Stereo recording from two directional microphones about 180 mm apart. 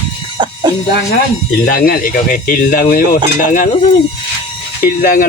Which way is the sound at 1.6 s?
55° left (ahead or behind).